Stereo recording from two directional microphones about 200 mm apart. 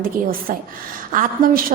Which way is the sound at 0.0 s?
45° right (ahead or behind).